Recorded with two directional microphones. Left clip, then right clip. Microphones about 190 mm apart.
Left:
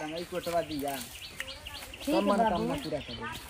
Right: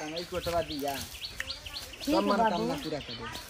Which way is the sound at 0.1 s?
Centre (ahead or behind).